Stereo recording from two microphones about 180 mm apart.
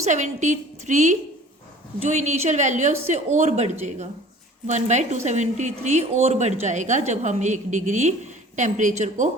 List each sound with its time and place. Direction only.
0.0 s a woman's voice: 40° right (ahead or behind)